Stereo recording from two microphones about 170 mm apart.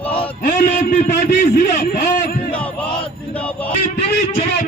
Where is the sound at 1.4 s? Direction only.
45° left (ahead or behind).